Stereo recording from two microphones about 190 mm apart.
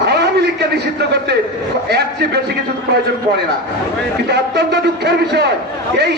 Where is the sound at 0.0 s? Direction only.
60° right (ahead or behind).